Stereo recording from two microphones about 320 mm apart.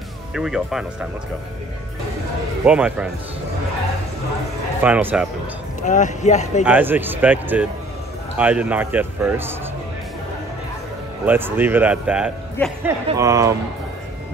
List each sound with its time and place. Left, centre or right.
0.3 s a man's voice: centre
2.6 s a man's voice: centre
4.8 s a man's voice: centre
5.8 s speech: left
6.6 s a man's voice: centre
11.2 s a man's voice: centre